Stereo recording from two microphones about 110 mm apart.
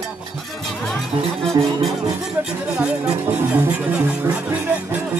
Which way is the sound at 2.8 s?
10° right (ahead or behind).